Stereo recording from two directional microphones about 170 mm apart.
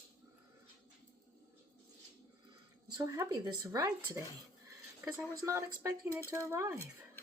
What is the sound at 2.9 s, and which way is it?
A woman's voice, 20° right (ahead or behind).